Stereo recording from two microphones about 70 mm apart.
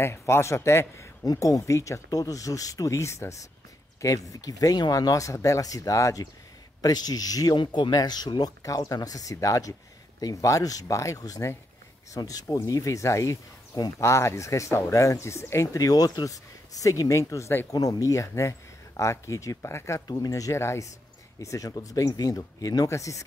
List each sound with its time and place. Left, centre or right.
0.0 s speech: left
1.2 s speech: left
2.0 s speech: left
6.8 s speech: left
8.7 s speech: left
12.2 s speech: left
12.4 s speech: left
14.0 s speech: left
17.7 s speech: left
20.1 s speech: left
20.5 s speech: left